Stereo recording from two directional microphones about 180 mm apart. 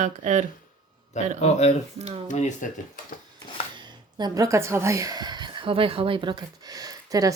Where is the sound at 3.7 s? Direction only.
25° right (ahead or behind).